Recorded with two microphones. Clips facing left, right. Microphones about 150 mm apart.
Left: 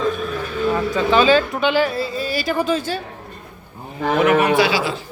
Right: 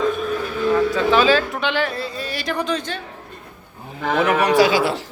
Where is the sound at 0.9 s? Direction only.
Centre (ahead or behind).